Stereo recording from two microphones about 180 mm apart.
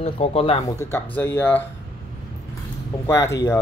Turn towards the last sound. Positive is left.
turn(degrees=15)  # may be behind; listen again after turning